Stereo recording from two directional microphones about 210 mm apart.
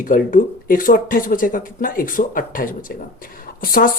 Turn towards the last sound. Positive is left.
turn(degrees=40)  # may be behind; listen again after turning